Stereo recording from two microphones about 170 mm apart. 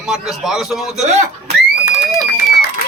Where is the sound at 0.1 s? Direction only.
Centre (ahead or behind).